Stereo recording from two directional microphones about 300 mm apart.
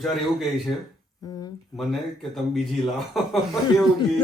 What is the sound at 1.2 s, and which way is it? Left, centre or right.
Speech, centre.